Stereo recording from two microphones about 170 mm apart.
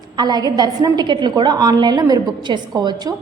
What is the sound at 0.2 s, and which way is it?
A woman's voice, 25° right (ahead or behind).